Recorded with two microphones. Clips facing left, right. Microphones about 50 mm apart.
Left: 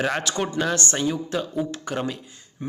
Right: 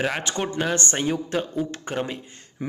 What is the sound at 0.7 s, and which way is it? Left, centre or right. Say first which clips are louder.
Speech: even; right.